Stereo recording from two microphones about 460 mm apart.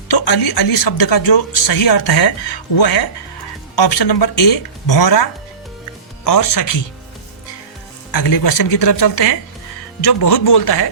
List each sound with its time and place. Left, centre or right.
0.1 s speech: left
6.2 s speech: left
8.1 s a man's voice: left